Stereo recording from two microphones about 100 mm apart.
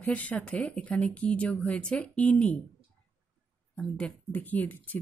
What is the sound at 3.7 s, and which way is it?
Speech, 10° left (ahead or behind).